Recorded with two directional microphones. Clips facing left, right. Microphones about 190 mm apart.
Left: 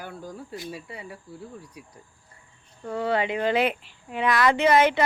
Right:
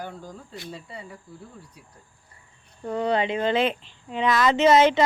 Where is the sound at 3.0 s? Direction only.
25° right (ahead or behind).